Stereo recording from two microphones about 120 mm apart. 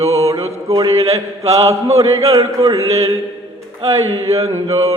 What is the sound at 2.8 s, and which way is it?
Mantra, 60° right (ahead or behind).